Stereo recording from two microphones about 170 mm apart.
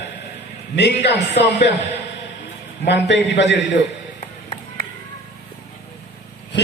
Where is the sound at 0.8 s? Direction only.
90° left.